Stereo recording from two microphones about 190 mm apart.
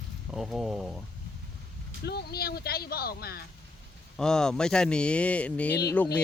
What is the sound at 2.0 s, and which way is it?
Speech, 55° left (ahead or behind).